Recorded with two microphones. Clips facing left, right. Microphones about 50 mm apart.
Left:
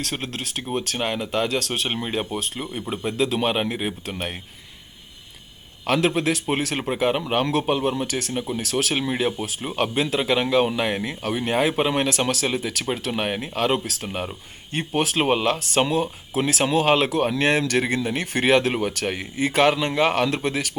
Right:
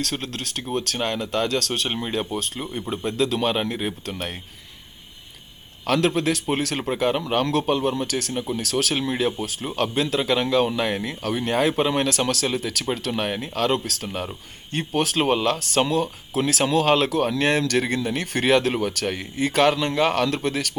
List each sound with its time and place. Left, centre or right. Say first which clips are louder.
0.0 s speech: right 1 dB; centre
5.8 s speech: even; centre